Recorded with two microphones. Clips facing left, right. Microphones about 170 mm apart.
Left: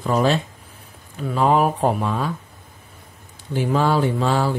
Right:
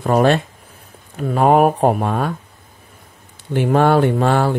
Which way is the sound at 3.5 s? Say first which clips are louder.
Right 5 dB; 60° right (ahead or behind).